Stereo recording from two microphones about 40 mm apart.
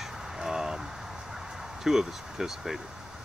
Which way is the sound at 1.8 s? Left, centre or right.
Centre.